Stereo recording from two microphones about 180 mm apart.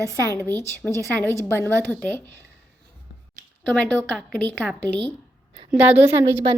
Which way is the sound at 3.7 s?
5° left (ahead or behind).